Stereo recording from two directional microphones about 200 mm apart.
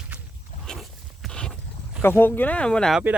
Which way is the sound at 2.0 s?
10° left (ahead or behind).